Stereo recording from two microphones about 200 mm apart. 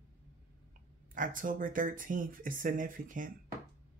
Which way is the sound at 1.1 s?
40° right (ahead or behind).